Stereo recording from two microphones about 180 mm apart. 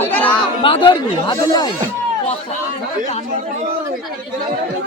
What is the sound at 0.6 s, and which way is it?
Speech, 25° left (ahead or behind).